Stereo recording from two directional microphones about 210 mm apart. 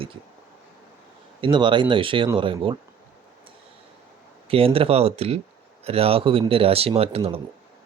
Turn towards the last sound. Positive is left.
turn(degrees=-30)  # may be behind; listen again after turning